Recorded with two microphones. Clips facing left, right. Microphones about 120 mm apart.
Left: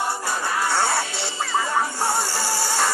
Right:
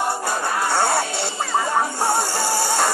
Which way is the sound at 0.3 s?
25° right (ahead or behind).